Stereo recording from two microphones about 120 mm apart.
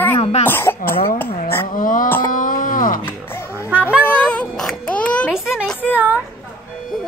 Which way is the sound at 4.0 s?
15° left (ahead or behind).